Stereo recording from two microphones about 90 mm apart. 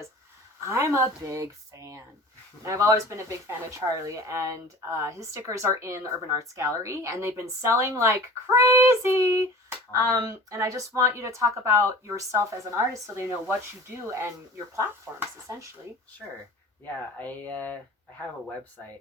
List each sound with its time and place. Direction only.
0.6 s a woman's voice: 35° right (ahead or behind)
17.2 s speech: 20° left (ahead or behind)